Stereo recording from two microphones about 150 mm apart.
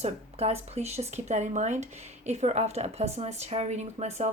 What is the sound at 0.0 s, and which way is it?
A woman's voice, 45° right (ahead or behind).